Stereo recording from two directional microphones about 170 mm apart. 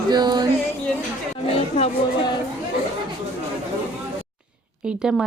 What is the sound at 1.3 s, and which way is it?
Speech, 40° left (ahead or behind).